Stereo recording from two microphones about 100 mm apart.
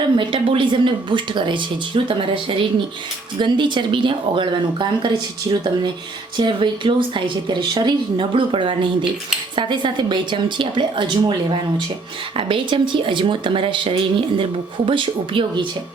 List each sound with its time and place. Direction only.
0.2 s speech: 55° right (ahead or behind)
12.4 s speech: 60° right (ahead or behind)